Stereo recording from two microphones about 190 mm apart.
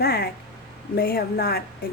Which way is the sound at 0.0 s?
55° left (ahead or behind).